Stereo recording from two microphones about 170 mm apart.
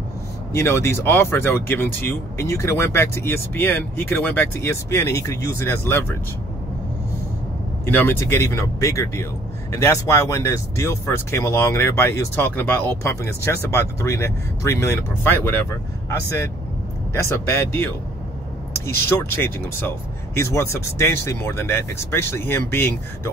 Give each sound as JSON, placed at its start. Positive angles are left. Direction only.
{"t": 0.5, "sound": "speech", "side_deg": 15}
{"t": 7.8, "sound": "speech", "side_deg": 10}
{"t": 17.1, "sound": "speech", "side_deg": 15}
{"t": 18.9, "sound": "speech", "side_deg": 15}